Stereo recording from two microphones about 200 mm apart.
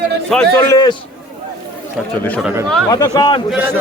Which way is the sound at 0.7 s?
20° left (ahead or behind).